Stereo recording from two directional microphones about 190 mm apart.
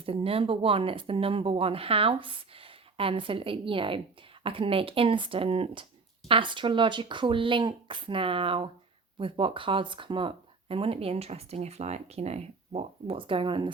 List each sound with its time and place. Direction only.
0.0 s speech: 30° right (ahead or behind)